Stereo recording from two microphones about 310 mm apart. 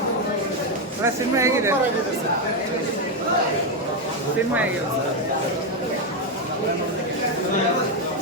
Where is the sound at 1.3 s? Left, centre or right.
Centre.